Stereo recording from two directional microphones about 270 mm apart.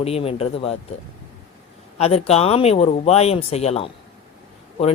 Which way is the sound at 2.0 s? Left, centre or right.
Left.